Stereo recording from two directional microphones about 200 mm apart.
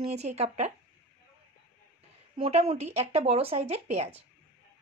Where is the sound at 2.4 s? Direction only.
30° right (ahead or behind).